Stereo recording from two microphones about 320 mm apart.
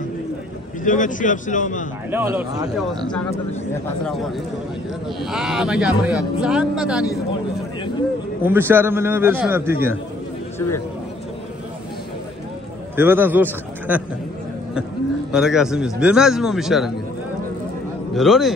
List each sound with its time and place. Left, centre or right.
0.8 s a man's voice: left
2.0 s a man's voice: centre
4.0 s speech: centre
8.5 s a man's voice: centre
12.9 s a man's voice: centre
15.3 s speech: centre
18.1 s speech: centre